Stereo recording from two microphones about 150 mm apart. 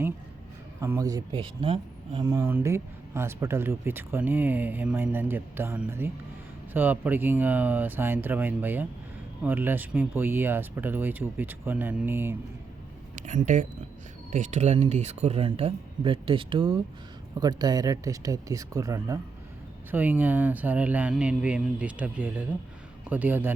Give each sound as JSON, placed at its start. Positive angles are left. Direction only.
{"t": 0.8, "sound": "speech", "side_deg": -20}
{"t": 13.1, "sound": "speech", "side_deg": -55}
{"t": 19.9, "sound": "speech", "side_deg": -10}